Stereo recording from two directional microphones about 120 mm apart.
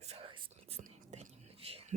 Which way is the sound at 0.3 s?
45° right (ahead or behind).